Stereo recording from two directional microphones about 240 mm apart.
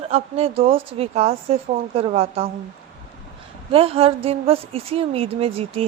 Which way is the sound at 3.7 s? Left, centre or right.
Right.